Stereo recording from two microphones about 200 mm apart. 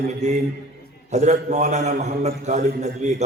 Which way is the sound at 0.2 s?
35° right (ahead or behind).